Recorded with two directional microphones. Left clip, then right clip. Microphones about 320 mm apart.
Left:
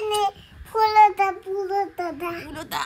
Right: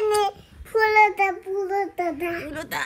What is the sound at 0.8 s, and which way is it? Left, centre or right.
A woman's voice, centre.